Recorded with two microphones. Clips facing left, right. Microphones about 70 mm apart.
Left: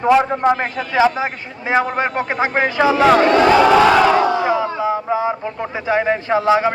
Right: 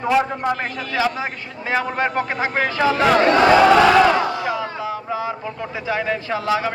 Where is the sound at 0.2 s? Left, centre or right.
Left.